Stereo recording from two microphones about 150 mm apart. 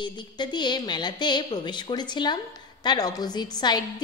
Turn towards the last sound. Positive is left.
turn(degrees=25)  # may be behind; listen again after turning